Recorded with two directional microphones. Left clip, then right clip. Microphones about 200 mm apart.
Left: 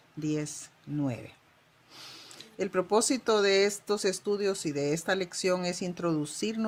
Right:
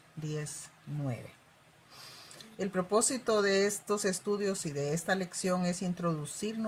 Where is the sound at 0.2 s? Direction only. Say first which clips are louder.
Left 8 dB; 40° left (ahead or behind).